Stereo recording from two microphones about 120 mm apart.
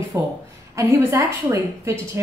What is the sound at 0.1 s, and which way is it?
A woman's voice, 25° right (ahead or behind).